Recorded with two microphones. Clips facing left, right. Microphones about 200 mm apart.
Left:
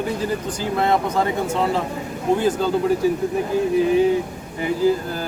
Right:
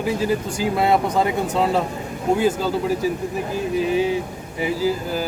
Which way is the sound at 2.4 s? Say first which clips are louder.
Left 1 dB; 5° right (ahead or behind).